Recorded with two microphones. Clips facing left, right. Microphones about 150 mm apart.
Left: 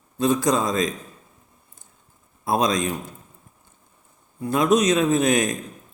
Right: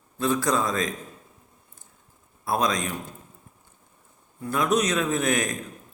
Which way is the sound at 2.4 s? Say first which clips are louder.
Left 4 dB; 20° left (ahead or behind).